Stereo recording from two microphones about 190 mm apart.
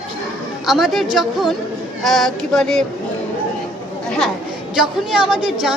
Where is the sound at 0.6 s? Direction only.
Centre (ahead or behind).